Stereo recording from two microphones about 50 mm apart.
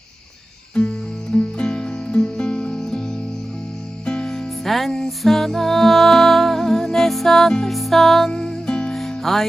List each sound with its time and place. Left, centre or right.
0.7 s music: left; by 9.5 s centre